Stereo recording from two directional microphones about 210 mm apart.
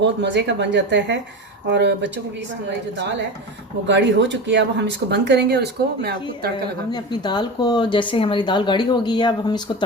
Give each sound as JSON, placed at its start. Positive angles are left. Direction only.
{"t": 0.0, "sound": "speech", "side_deg": -55}
{"t": 6.9, "sound": "a woman's voice", "side_deg": 20}